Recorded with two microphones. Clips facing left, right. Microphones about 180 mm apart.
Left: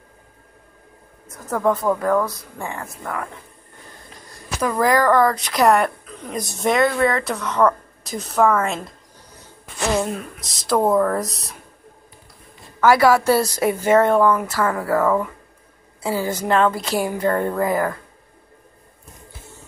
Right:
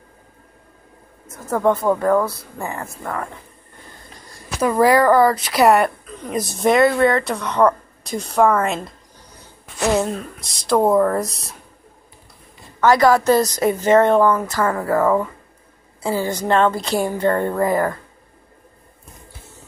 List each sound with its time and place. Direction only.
1.3 s a woman's voice: centre (ahead or behind)
4.6 s a woman's voice: 10° right (ahead or behind)
10.1 s a woman's voice: centre (ahead or behind)
12.8 s a woman's voice: 5° left (ahead or behind)
14.7 s speech: 20° right (ahead or behind)
16.2 s a woman's voice: 5° left (ahead or behind)